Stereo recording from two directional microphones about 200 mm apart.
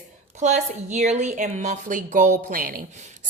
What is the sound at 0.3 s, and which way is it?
A woman's voice, 35° right (ahead or behind).